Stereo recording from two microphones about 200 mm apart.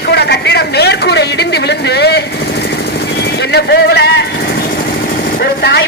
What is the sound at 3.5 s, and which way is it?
Speech, 55° left (ahead or behind).